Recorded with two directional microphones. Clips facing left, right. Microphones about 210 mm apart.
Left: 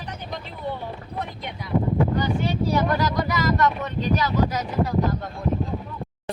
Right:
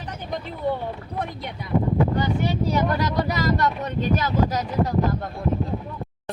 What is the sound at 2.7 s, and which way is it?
Speech, 30° right (ahead or behind).